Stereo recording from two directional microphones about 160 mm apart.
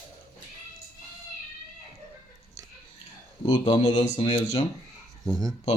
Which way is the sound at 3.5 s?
35° left (ahead or behind).